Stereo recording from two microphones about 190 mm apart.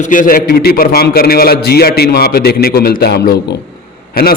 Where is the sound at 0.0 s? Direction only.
45° left (ahead or behind).